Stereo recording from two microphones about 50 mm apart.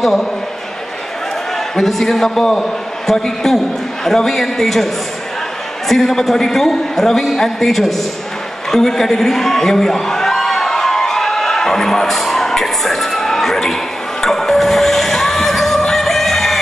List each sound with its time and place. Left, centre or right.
0.0 s a man's voice: centre
1.8 s a man's voice: centre
5.9 s a man's voice: centre
8.7 s a sound: centre
14.2 s music: centre